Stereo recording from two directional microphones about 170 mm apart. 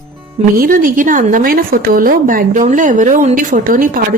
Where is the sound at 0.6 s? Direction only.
60° right (ahead or behind).